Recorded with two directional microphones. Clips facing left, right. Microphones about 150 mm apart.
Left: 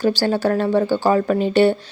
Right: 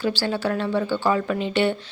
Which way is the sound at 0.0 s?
40° left (ahead or behind).